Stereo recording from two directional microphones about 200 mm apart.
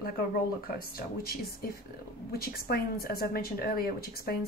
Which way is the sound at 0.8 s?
50° left (ahead or behind).